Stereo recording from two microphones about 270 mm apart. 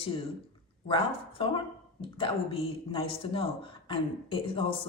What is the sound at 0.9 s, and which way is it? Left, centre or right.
A woman's voice, centre.